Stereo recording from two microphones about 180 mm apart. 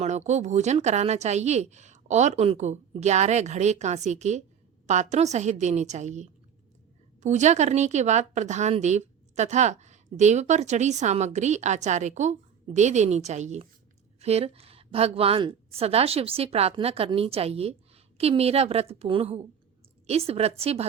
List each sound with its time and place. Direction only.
0.0 s a woman's voice: 40° right (ahead or behind)